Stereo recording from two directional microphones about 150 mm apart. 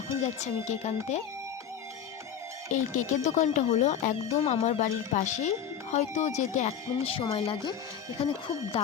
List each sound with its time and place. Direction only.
0.4 s speech: 50° left (ahead or behind)
2.6 s speech: 55° left (ahead or behind)
6.9 s speech: 35° left (ahead or behind)